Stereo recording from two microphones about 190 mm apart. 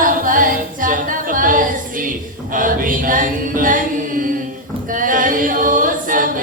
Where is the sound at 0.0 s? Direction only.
45° right (ahead or behind).